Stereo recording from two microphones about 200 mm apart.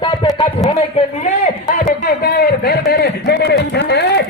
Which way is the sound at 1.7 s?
45° left (ahead or behind).